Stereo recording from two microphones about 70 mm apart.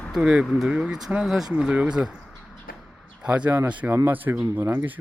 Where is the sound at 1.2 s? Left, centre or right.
Centre.